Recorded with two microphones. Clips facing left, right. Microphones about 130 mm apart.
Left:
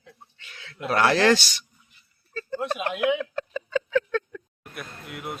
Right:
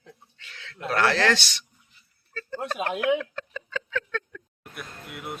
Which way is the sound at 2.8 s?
35° right (ahead or behind).